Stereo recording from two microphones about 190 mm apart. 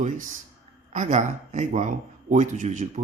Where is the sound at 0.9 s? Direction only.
40° right (ahead or behind).